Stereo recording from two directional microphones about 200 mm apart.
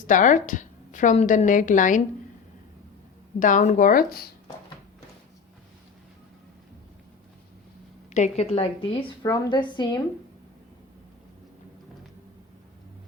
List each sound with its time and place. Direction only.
0.1 s a woman's voice: 40° left (ahead or behind)
3.4 s a woman's voice: 35° left (ahead or behind)
8.1 s a woman's voice: 35° left (ahead or behind)